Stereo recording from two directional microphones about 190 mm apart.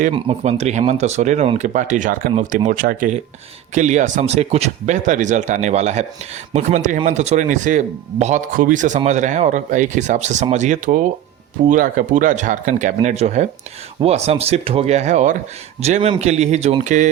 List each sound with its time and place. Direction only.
0.1 s speech: 35° right (ahead or behind)